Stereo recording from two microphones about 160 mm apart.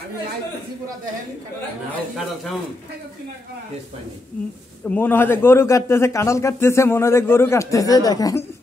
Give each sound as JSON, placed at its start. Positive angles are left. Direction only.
{"t": 4.8, "sound": "a man's voice", "side_deg": 10}